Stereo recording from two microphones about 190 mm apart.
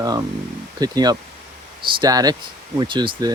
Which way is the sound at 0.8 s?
20° right (ahead or behind).